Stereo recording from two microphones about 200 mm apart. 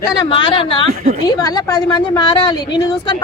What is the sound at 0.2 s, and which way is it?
Speech, 25° left (ahead or behind).